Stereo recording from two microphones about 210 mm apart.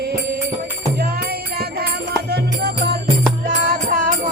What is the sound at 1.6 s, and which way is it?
Music, 45° right (ahead or behind).